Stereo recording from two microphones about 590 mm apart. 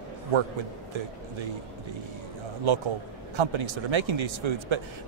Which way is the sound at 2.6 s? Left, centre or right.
Right.